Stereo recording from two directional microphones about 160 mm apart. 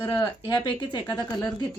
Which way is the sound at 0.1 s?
25° left (ahead or behind).